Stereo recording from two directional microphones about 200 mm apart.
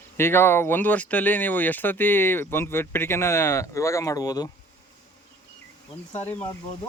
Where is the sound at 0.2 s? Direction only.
10° left (ahead or behind).